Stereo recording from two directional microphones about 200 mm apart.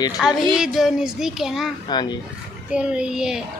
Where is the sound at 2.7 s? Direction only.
5° right (ahead or behind).